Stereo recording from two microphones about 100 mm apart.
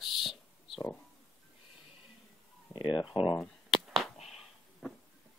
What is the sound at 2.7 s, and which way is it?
Speech, 50° left (ahead or behind).